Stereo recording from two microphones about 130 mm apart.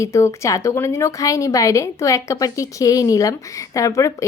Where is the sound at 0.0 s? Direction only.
20° left (ahead or behind).